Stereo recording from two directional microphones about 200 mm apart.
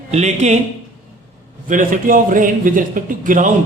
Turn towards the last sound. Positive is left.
turn(degrees=-40)  # may be behind; listen again after turning